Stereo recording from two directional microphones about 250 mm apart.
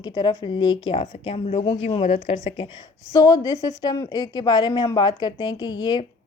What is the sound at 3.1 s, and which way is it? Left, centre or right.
A woman's voice, centre.